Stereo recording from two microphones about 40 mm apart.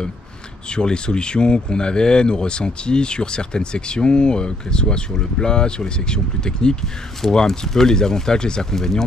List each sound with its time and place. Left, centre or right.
0.7 s speech: left